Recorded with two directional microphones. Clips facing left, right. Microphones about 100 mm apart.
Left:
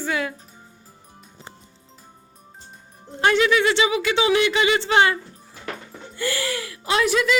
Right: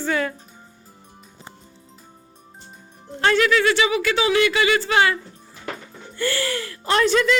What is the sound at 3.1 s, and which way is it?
Speech, 20° left (ahead or behind).